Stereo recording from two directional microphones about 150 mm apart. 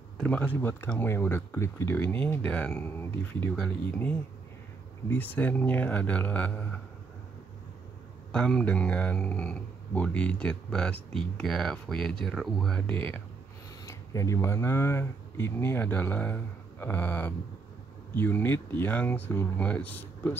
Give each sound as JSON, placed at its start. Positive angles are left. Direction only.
{"t": 0.2, "sound": "speech", "side_deg": 10}
{"t": 3.5, "sound": "speech", "side_deg": 0}
{"t": 8.3, "sound": "speech", "side_deg": 5}
{"t": 13.8, "sound": "speech", "side_deg": 20}